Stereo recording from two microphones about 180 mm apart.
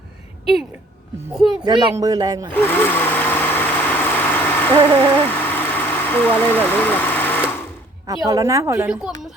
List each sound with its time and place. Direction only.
1.3 s a woman's voice: centre (ahead or behind)
1.6 s speech: 20° right (ahead or behind)
2.5 s a sound: 10° left (ahead or behind)
5.2 s vehicle: 10° left (ahead or behind)
8.0 s a woman's voice: 20° right (ahead or behind)
8.9 s speech: 5° right (ahead or behind)